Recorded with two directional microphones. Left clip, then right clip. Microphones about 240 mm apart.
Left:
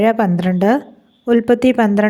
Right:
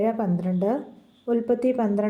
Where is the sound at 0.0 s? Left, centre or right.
Left.